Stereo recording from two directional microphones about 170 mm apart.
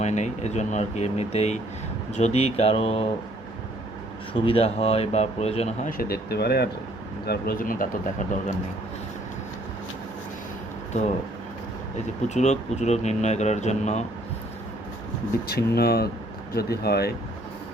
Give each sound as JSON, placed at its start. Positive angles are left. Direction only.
{"t": 0.0, "sound": "speech", "side_deg": 40}
{"t": 4.4, "sound": "speech", "side_deg": 35}
{"t": 6.0, "sound": "speech", "side_deg": 70}
{"t": 7.3, "sound": "speech", "side_deg": 60}
{"t": 12.3, "sound": "speech", "side_deg": 40}
{"t": 15.4, "sound": "speech", "side_deg": 65}